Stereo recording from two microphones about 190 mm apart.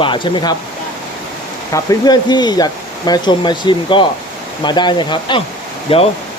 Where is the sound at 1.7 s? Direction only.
20° left (ahead or behind).